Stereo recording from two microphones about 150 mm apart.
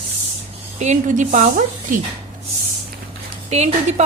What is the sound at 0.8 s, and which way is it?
Speech, 55° right (ahead or behind).